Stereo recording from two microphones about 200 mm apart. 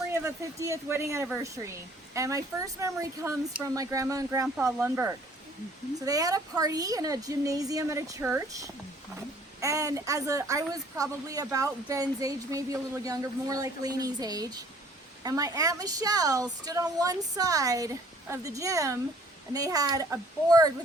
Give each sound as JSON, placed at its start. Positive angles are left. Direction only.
{"t": 0.1, "sound": "a woman's voice", "side_deg": -15}